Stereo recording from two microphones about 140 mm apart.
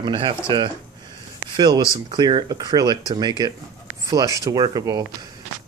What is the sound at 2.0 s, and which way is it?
Speech, 30° right (ahead or behind).